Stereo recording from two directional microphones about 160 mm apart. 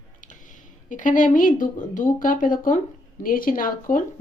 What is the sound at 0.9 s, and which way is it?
Speech, 55° left (ahead or behind).